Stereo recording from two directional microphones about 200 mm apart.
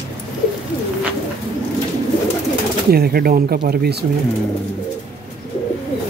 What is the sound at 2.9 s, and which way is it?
Speech, 50° right (ahead or behind).